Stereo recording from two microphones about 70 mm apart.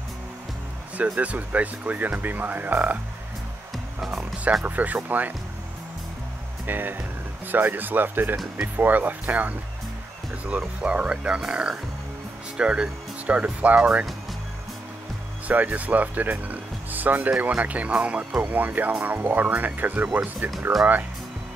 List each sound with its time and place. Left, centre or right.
0.9 s speech: right
3.7 s music: centre
4.6 s speech: right
6.6 s speech: right
10.8 s speech: centre
15.4 s speech: right